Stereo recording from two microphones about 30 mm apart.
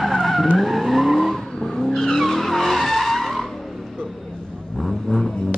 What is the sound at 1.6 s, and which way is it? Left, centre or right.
Vehicle, centre.